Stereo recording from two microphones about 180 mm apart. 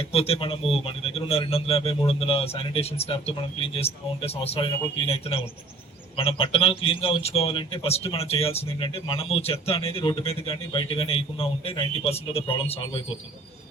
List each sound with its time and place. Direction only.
0.1 s a man's voice: 35° left (ahead or behind)